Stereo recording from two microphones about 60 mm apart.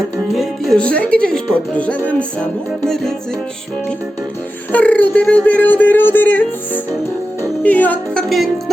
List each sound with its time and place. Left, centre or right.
0.3 s music: centre
0.8 s music: left
2.8 s music: centre
4.7 s speech: left
7.6 s music: left
8.3 s music: centre